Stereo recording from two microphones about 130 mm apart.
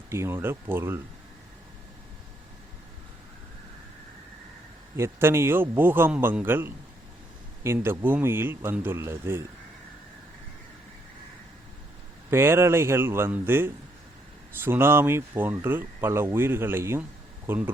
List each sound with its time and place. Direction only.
0.1 s speech: 20° right (ahead or behind)
4.9 s speech: 20° right (ahead or behind)
12.3 s speech: 20° right (ahead or behind)